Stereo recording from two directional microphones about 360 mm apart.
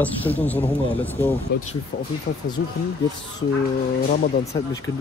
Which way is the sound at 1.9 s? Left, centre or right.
Left.